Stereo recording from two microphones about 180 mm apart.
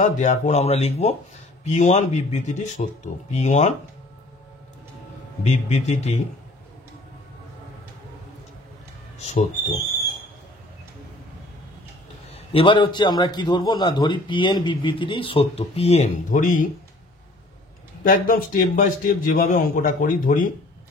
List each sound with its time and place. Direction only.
0.0 s speech: 40° left (ahead or behind)
5.4 s speech: 40° left (ahead or behind)
12.3 s a man's voice: 30° left (ahead or behind); by 16.6 s 50° left (ahead or behind)
18.0 s speech: 50° left (ahead or behind)